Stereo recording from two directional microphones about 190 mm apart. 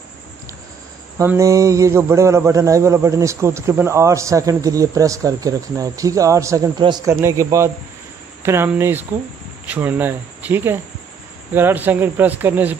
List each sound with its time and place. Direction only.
1.1 s a man's voice: 15° right (ahead or behind)